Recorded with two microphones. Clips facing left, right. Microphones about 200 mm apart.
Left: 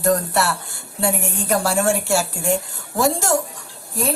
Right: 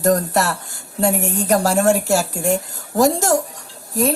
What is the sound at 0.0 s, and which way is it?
A woman's voice, 40° right (ahead or behind).